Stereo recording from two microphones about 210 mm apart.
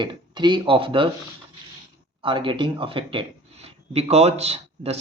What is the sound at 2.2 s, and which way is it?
Speech, 25° right (ahead or behind).